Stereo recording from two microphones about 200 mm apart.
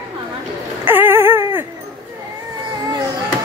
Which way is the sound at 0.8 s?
10° right (ahead or behind).